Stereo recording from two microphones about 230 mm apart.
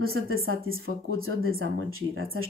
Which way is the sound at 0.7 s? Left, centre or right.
Right.